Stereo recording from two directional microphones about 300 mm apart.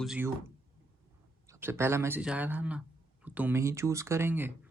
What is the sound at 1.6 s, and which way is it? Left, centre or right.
Speech, centre.